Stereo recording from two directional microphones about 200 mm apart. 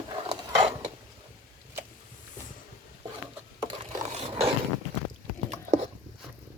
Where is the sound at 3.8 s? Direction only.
30° right (ahead or behind).